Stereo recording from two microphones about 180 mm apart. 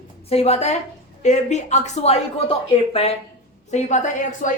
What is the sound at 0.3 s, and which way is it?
Speech, 35° left (ahead or behind).